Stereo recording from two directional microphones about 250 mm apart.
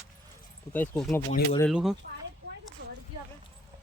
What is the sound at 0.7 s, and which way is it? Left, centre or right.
Speech, centre.